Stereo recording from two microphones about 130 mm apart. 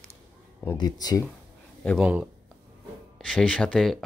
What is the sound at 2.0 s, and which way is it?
Speech, 10° right (ahead or behind).